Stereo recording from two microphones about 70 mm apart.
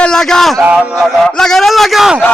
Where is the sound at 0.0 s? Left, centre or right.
Centre.